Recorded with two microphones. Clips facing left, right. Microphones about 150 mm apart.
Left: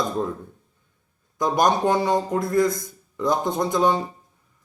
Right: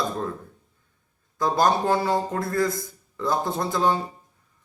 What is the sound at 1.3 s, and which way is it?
A man's voice, 15° left (ahead or behind).